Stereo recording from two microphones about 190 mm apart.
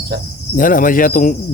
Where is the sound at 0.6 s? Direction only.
45° left (ahead or behind).